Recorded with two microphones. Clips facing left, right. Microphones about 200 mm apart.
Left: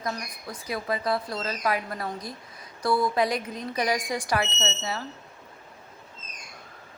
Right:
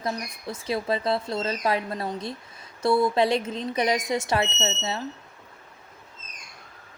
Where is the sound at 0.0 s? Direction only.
25° right (ahead or behind).